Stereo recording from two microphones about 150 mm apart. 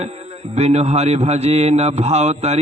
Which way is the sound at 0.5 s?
45° right (ahead or behind).